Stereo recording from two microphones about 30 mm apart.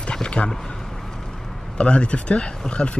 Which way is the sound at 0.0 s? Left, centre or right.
Left.